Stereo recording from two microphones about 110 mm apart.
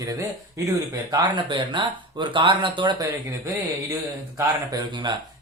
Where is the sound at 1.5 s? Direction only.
45° right (ahead or behind).